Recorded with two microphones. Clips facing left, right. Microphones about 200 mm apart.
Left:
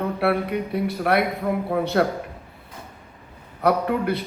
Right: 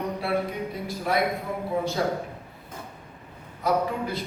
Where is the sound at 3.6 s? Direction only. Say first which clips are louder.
Left 5 dB; 65° left (ahead or behind).